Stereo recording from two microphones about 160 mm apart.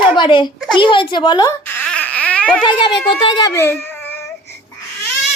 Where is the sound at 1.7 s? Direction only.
10° left (ahead or behind).